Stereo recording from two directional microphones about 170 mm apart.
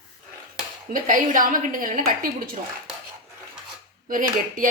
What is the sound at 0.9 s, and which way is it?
A woman's voice, 50° right (ahead or behind).